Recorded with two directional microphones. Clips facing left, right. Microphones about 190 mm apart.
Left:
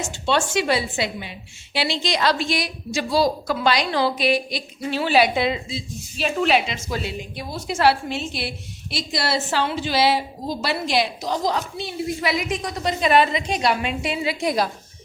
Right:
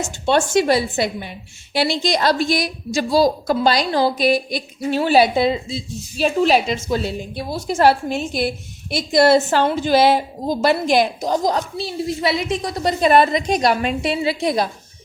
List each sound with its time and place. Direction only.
0.3 s a woman's voice: 45° right (ahead or behind)
5.2 s a woman's voice: 35° right (ahead or behind)